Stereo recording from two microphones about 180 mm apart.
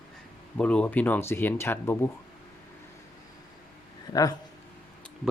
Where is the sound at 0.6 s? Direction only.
5° left (ahead or behind).